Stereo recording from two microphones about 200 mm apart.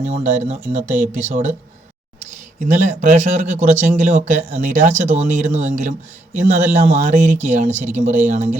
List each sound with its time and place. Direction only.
0.0 s speech: 35° right (ahead or behind)
2.6 s speech: 40° right (ahead or behind)